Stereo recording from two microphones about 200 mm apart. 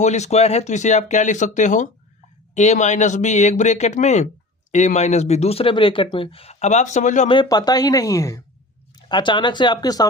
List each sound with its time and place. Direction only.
0.0 s speech: 35° left (ahead or behind)
7.3 s speech: 20° left (ahead or behind)